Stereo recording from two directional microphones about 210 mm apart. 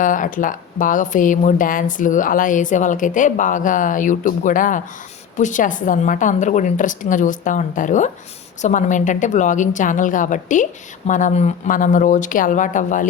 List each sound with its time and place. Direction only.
0.0 s speech: 40° left (ahead or behind)